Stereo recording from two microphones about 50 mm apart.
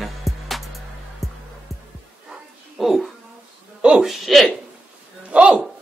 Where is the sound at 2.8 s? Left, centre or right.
Centre.